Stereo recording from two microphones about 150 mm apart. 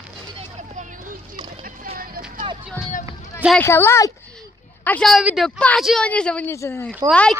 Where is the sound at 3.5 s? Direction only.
15° left (ahead or behind).